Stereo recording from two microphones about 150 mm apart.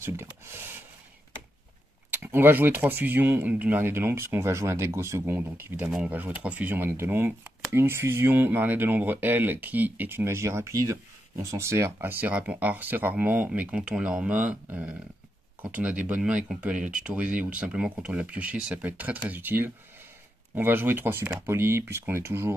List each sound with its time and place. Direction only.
0.0 s speech: 15° right (ahead or behind)
2.0 s speech: 15° right (ahead or behind)